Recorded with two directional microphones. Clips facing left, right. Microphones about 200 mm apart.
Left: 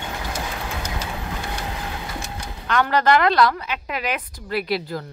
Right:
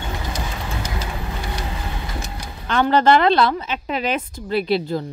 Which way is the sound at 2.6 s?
30° right (ahead or behind).